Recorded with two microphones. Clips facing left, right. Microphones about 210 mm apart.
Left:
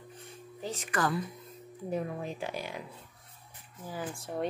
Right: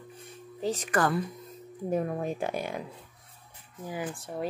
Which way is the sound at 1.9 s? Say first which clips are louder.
Right 5 dB; 50° right (ahead or behind).